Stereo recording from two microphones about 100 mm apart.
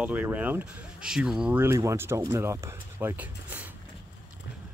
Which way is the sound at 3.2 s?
15° right (ahead or behind).